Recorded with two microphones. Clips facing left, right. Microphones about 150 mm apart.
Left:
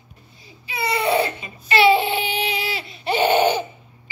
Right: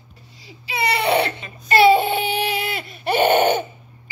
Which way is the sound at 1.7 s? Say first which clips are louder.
Right 2 dB; 45° right (ahead or behind).